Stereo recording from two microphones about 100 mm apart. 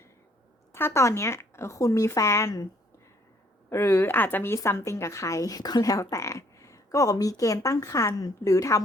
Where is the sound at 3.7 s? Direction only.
25° left (ahead or behind).